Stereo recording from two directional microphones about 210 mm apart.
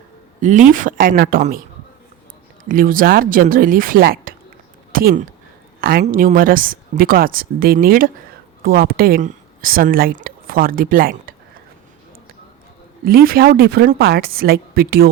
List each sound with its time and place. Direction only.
0.7 s speech: 40° right (ahead or behind)
2.6 s speech: 40° right (ahead or behind)
4.9 s a sound: 45° right (ahead or behind)
5.8 s speech: 45° right (ahead or behind)
13.1 s speech: 45° right (ahead or behind)